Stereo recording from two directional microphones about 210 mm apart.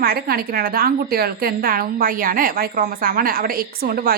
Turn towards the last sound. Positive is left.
turn(degrees=-45)  # may be behind; listen again after turning